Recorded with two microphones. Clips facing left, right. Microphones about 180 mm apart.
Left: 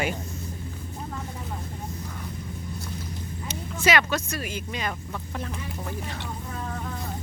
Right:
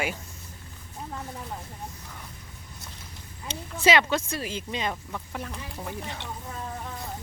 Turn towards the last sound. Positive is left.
turn(degrees=-20)  # may be behind; listen again after turning